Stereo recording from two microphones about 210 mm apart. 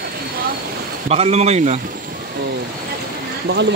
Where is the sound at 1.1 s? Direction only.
30° right (ahead or behind).